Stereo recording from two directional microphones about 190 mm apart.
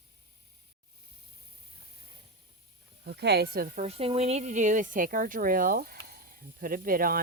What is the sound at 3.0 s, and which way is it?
Speech, 60° right (ahead or behind).